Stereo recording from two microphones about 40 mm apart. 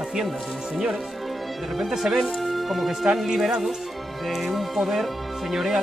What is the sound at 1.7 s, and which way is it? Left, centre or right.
Speech, centre.